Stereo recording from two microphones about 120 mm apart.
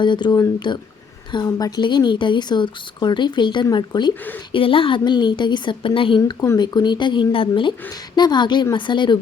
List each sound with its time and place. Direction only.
0.0 s speech: 40° left (ahead or behind)